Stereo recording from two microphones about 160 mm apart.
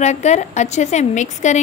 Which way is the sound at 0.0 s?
45° left (ahead or behind).